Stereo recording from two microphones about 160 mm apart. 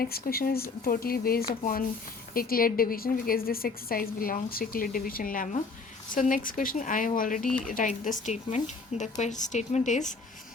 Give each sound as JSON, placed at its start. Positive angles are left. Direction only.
{"t": 0.0, "sound": "a woman's voice", "side_deg": 70}
{"t": 7.4, "sound": "speech", "side_deg": 5}
{"t": 7.7, "sound": "a woman's voice", "side_deg": 55}